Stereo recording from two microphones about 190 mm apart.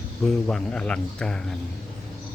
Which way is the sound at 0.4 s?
5° left (ahead or behind).